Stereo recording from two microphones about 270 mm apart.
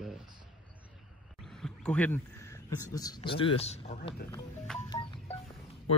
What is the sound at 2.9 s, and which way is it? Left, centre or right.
Speech, centre.